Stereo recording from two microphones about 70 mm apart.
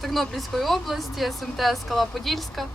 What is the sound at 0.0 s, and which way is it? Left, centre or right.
Speech, centre.